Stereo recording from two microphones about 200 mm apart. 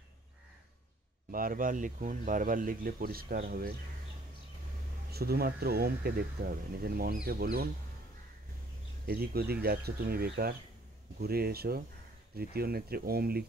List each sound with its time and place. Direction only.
1.3 s speech: 45° right (ahead or behind)
5.1 s speech: 50° right (ahead or behind)
9.0 s speech: 50° right (ahead or behind)